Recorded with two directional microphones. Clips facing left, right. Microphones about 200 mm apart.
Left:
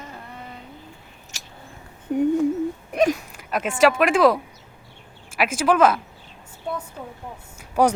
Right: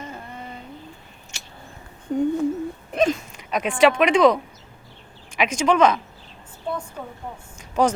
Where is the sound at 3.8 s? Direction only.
Centre (ahead or behind).